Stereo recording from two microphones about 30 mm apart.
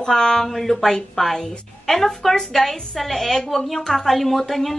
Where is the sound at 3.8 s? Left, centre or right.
Left.